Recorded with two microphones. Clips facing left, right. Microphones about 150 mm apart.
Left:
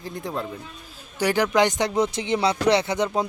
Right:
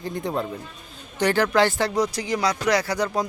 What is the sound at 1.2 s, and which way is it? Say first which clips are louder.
Speech: even; 15° left (ahead or behind).